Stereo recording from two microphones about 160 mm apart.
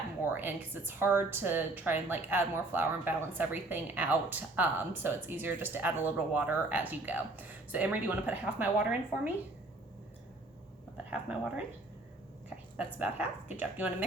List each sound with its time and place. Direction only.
0.3 s a woman's voice: 10° right (ahead or behind)
10.9 s speech: 5° right (ahead or behind)
12.7 s a woman's voice: 10° right (ahead or behind)